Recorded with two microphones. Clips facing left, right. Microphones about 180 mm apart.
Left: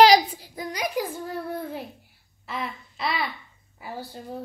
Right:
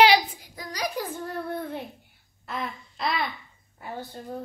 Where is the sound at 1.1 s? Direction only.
5° left (ahead or behind).